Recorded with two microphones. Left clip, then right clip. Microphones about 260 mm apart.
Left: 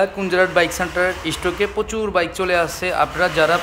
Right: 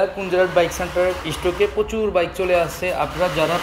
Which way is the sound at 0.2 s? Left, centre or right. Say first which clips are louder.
Left 1 dB; centre.